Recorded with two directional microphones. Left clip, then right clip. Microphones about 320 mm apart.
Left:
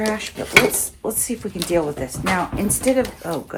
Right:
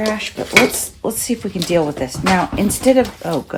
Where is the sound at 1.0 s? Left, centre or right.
Right.